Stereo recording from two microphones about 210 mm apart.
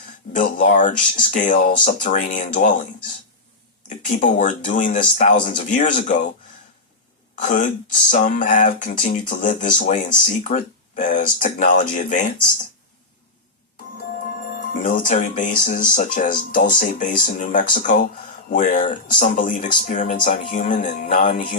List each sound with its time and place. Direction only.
0.3 s speech: 40° left (ahead or behind)
3.8 s speech: 40° left (ahead or behind)
7.3 s speech: 35° left (ahead or behind)
14.5 s speech: 40° left (ahead or behind)